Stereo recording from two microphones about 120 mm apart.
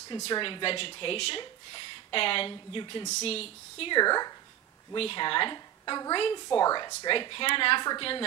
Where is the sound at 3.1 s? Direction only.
60° left (ahead or behind).